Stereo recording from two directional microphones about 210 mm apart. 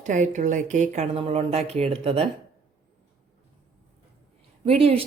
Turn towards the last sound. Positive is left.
turn(degrees=-30)  # may be behind; listen again after turning